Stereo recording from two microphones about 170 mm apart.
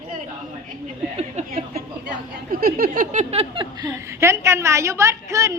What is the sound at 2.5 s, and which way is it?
Speech, 60° right (ahead or behind).